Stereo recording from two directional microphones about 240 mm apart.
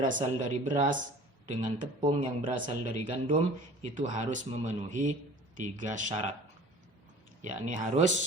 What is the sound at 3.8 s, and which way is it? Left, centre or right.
Speech, right.